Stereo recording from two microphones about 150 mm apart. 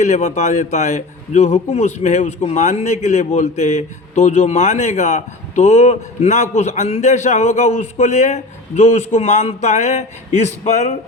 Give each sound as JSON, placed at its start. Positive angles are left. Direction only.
{"t": 0.0, "sound": "a man's voice", "side_deg": 50}